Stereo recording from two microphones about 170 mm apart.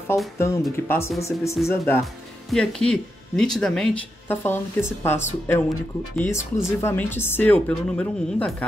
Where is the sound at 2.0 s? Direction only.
Centre (ahead or behind).